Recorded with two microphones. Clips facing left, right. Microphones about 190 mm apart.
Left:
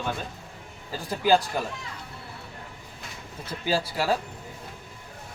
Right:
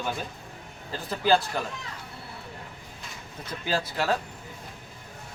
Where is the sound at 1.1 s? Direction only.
10° left (ahead or behind).